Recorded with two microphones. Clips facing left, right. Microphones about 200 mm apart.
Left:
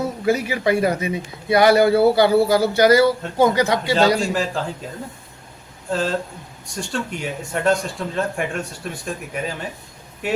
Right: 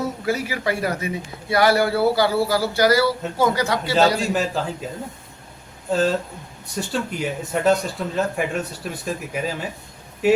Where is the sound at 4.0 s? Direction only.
5° right (ahead or behind).